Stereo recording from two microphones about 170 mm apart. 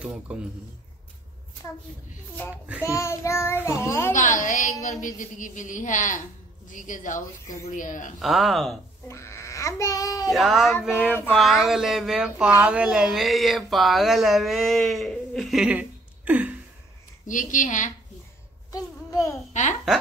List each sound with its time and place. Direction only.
0.0 s a child's voice: 5° right (ahead or behind)
2.5 s a child's voice: 10° right (ahead or behind)
2.9 s child singing: 15° left (ahead or behind)
4.1 s a woman's voice: 50° left (ahead or behind)
8.2 s speech: centre (ahead or behind)
9.0 s a child's voice: 15° left (ahead or behind)
10.3 s speech: centre (ahead or behind)
11.1 s child singing: 10° left (ahead or behind)
11.3 s speech: centre (ahead or behind)
17.3 s a woman's voice: 50° left (ahead or behind)
18.7 s a sound: 20° left (ahead or behind)
19.5 s a woman's voice: 45° left (ahead or behind)